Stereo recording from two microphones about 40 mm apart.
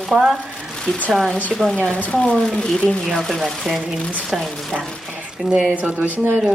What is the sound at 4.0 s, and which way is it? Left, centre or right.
Speech, left.